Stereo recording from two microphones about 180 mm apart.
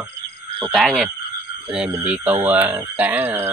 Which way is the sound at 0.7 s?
Centre (ahead or behind).